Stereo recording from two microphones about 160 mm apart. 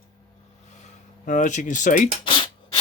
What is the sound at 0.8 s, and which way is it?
Speech, 55° left (ahead or behind).